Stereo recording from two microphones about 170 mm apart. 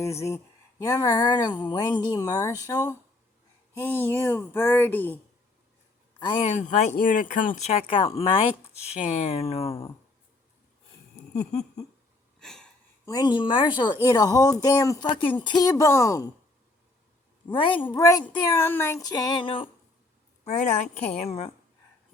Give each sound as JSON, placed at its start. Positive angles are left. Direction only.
{"t": 0.0, "sound": "a woman's voice", "side_deg": 15}
{"t": 6.4, "sound": "speech", "side_deg": 45}
{"t": 12.4, "sound": "sniff", "side_deg": 5}
{"t": 13.1, "sound": "a woman's voice", "side_deg": 25}
{"t": 15.1, "sound": "a woman's voice", "side_deg": 30}
{"t": 17.5, "sound": "a woman's voice", "side_deg": 30}
{"t": 17.8, "sound": "a woman's voice", "side_deg": 20}
{"t": 20.4, "sound": "speech", "side_deg": 45}